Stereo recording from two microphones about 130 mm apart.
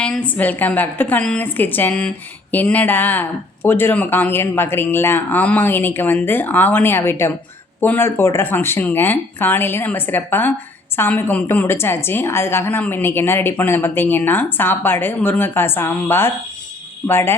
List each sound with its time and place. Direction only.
0.0 s a woman's voice: 10° left (ahead or behind)